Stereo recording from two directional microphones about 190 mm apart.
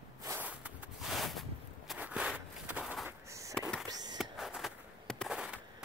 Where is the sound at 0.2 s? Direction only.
10° right (ahead or behind); by 3.8 s 5° left (ahead or behind).